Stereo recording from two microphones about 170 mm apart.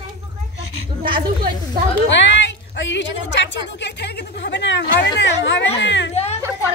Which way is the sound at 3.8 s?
90° left.